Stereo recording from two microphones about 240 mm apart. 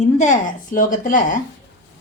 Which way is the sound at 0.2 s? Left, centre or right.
Left.